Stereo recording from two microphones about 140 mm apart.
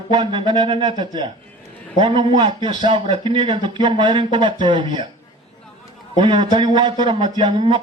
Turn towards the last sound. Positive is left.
turn(degrees=-35)  # may be behind; listen again after turning